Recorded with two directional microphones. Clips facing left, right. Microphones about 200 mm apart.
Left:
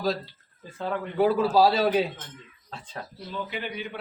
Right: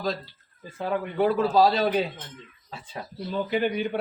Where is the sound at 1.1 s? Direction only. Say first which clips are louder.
Left 1 dB; 5° left (ahead or behind).